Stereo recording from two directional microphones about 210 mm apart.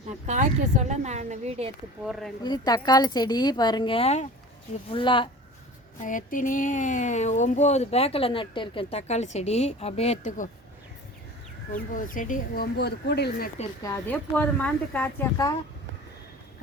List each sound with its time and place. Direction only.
0.3 s a woman's voice: 35° right (ahead or behind)
2.0 s speech: centre (ahead or behind)
2.4 s a woman's voice: 20° left (ahead or behind)
6.0 s speech: 40° left (ahead or behind)
11.7 s speech: 40° left (ahead or behind)
13.8 s speech: 10° left (ahead or behind)